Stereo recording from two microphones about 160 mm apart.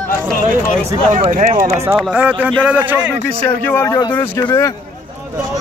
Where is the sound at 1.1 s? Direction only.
50° right (ahead or behind).